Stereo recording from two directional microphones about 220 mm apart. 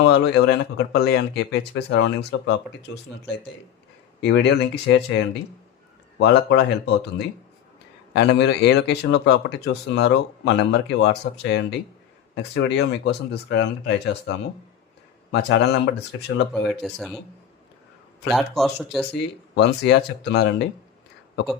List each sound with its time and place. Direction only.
0.0 s speech: 50° left (ahead or behind)
4.2 s speech: 55° left (ahead or behind)
16.6 s a man's voice: centre (ahead or behind)
18.3 s a man's voice: centre (ahead or behind)
19.1 s speech: 50° left (ahead or behind)